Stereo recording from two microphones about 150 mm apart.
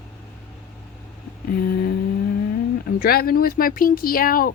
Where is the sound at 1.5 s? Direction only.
80° left.